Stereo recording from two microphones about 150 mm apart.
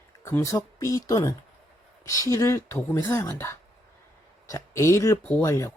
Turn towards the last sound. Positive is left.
turn(degrees=20)  # may be behind; listen again after turning